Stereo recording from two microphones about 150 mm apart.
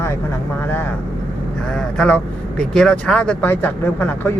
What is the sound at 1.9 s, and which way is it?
Speech, 5° left (ahead or behind).